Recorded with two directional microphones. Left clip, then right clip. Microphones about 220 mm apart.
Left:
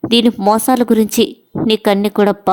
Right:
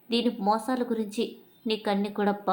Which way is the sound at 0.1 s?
45° left (ahead or behind).